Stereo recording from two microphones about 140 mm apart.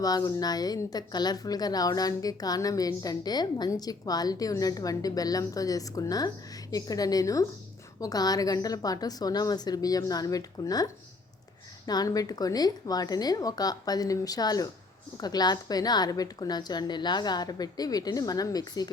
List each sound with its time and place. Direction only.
0.0 s a woman's voice: 25° left (ahead or behind)